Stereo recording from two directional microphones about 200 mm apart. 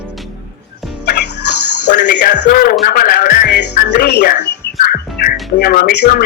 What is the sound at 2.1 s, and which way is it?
A man's voice, 40° left (ahead or behind).